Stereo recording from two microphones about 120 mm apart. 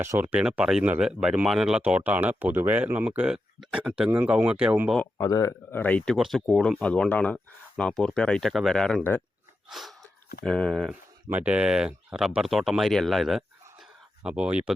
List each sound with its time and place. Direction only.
0.0 s speech: 20° right (ahead or behind)
5.1 s speech: 30° left (ahead or behind); by 6.1 s 10° left (ahead or behind)
6.1 s speech: centre (ahead or behind)
11.3 s speech: 10° right (ahead or behind)